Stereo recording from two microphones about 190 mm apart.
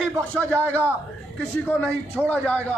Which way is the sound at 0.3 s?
10° left (ahead or behind).